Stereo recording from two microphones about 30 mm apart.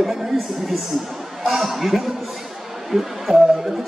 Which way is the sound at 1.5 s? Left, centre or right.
Centre.